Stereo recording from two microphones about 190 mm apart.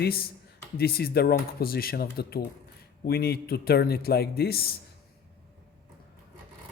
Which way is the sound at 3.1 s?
55° left (ahead or behind).